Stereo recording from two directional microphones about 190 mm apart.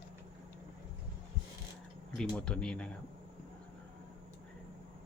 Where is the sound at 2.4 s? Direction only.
5° left (ahead or behind).